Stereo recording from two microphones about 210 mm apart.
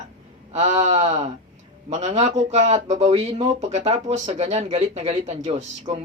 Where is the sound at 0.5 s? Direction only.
30° right (ahead or behind).